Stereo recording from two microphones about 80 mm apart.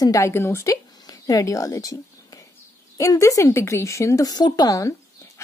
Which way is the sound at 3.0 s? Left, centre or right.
Left.